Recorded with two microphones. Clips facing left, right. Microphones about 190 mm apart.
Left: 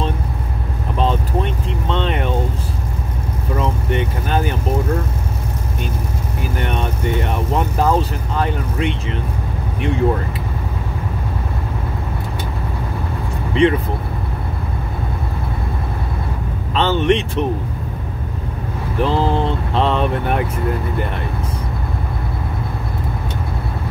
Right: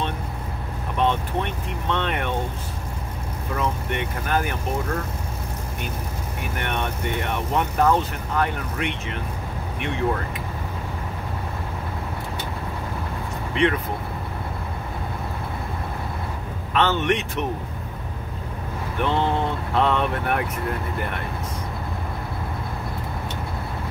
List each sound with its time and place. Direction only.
0.9 s vehicle: 30° left (ahead or behind)
3.5 s vehicle: 30° left (ahead or behind)
6.4 s speech: 30° left (ahead or behind)
13.5 s speech: 30° left (ahead or behind)
16.7 s speech: 30° left (ahead or behind)
18.9 s speech: 30° left (ahead or behind)